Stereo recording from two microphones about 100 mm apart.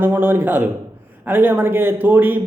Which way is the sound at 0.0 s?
20° right (ahead or behind).